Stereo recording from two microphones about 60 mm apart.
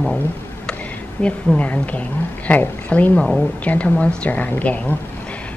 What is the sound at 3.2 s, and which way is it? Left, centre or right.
Speech, centre.